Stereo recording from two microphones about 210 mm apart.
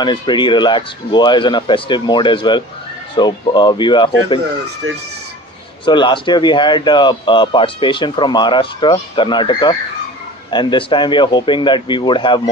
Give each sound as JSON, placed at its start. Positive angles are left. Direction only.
{"t": 0.0, "sound": "speech", "side_deg": 20}
{"t": 4.8, "sound": "speech", "side_deg": -70}
{"t": 5.9, "sound": "speech", "side_deg": 20}